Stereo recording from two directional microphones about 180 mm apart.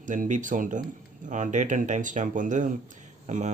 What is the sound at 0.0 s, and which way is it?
Speech, 45° right (ahead or behind).